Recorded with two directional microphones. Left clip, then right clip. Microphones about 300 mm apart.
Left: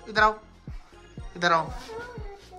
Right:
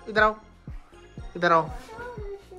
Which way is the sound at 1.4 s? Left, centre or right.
Centre.